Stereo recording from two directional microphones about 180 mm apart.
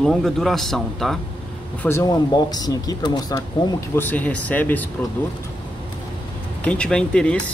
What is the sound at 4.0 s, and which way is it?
Speech, 10° left (ahead or behind).